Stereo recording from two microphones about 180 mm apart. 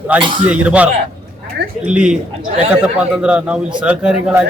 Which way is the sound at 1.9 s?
5° right (ahead or behind).